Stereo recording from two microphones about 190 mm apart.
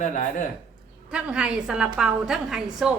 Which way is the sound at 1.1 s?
5° right (ahead or behind).